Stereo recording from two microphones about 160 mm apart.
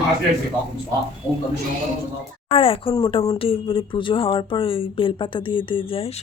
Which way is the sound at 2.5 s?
35° left (ahead or behind).